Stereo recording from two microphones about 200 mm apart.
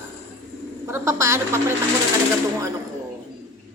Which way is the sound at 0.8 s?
15° right (ahead or behind).